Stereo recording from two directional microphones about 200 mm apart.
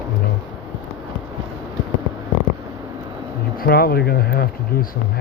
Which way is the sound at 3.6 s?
50° left (ahead or behind).